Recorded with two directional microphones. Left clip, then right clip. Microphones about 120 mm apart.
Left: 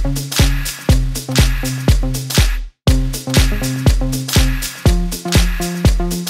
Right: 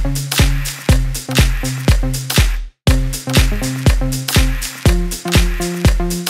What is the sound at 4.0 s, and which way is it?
Music, 5° right (ahead or behind).